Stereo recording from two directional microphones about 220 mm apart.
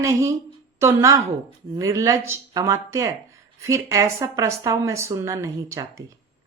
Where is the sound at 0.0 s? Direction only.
15° right (ahead or behind).